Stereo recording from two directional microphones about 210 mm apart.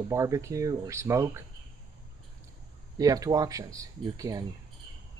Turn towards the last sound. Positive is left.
turn(degrees=-15)  # may be behind; listen again after turning